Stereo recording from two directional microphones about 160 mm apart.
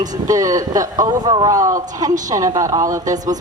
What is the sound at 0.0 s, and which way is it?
Speech, 20° right (ahead or behind).